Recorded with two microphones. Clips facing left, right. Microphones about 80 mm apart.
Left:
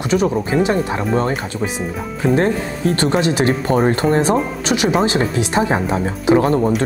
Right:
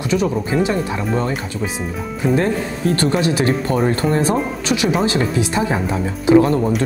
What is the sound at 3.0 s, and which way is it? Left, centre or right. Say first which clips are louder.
Speech: left 2 dB; left.